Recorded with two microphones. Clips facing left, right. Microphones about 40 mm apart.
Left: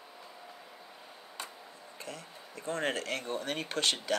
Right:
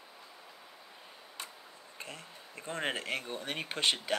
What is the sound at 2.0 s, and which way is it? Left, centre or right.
Speech, right.